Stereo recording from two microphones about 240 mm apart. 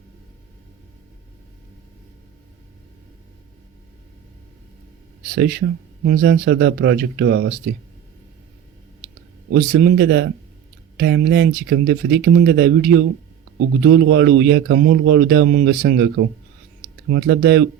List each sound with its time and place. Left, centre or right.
5.3 s speech: right
9.5 s speech: right